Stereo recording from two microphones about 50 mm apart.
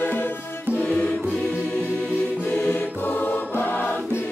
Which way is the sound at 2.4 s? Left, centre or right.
Left.